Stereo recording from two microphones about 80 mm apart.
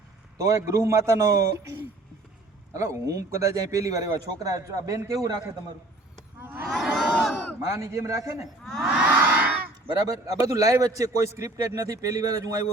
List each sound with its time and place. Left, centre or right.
0.3 s a man's voice: right
2.7 s a man's voice: right
6.4 s a sound: right
6.7 s crowd: centre
7.7 s a man's voice: right
8.6 s crowd: centre
9.0 s crowd: centre
9.9 s a man's voice: right